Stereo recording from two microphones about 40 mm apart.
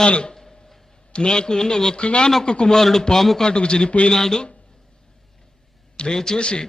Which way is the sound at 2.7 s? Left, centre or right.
Centre.